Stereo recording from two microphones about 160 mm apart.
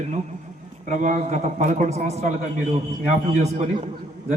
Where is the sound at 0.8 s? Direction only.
50° right (ahead or behind).